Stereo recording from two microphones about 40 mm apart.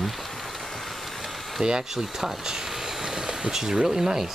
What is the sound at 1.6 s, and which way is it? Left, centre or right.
Speech, centre.